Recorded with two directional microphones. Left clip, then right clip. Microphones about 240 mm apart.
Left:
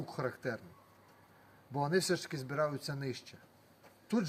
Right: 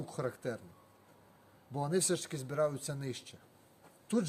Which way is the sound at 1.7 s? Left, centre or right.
Centre.